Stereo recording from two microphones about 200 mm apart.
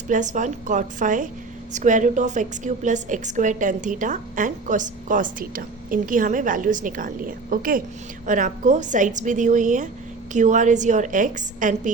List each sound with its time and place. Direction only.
0.1 s a woman's voice: 40° right (ahead or behind)